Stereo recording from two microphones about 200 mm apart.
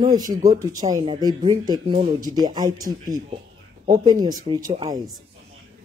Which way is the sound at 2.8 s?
40° right (ahead or behind).